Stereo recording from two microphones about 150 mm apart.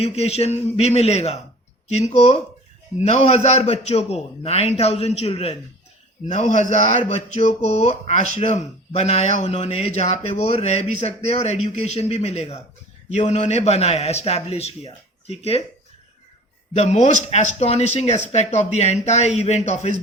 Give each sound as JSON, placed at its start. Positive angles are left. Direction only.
{"t": 0.0, "sound": "speech", "side_deg": 45}
{"t": 16.7, "sound": "speech", "side_deg": 50}